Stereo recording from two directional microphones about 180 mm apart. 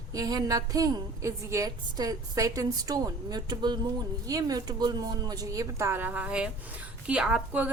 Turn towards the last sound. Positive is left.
turn(degrees=-5)  # may be behind; listen again after turning